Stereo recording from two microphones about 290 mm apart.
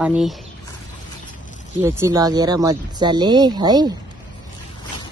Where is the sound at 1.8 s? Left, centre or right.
Centre.